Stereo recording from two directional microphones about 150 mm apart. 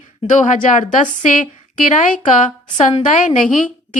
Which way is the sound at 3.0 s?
60° left (ahead or behind).